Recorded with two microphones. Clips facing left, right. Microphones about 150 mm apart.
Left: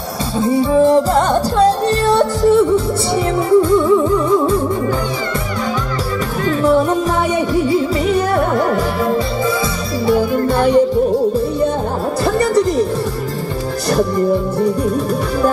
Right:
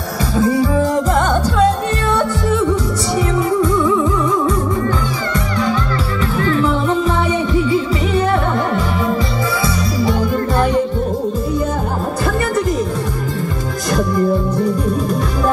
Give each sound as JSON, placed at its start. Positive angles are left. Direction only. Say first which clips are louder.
{"t": 0.4, "sound": "music", "louder": "left 3 dB", "side_deg": 30}
{"t": 12.4, "sound": "music", "louder": "left 5 dB", "side_deg": 35}